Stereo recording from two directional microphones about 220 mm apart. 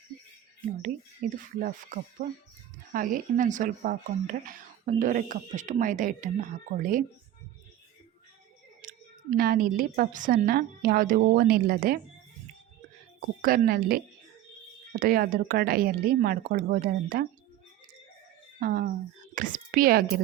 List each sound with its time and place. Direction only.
1.2 s speech: 35° right (ahead or behind)
8.8 s a sound: 40° right (ahead or behind)
9.4 s speech: 40° right (ahead or behind)
13.4 s speech: 40° right (ahead or behind)
18.6 s speech: 40° right (ahead or behind)